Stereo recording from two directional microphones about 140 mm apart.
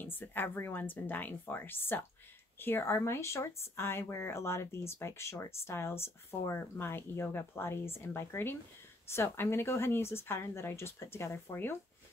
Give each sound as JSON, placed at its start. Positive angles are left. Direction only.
{"t": 0.0, "sound": "speech", "side_deg": 15}